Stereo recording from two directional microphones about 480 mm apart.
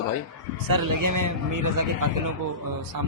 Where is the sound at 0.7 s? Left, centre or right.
Right.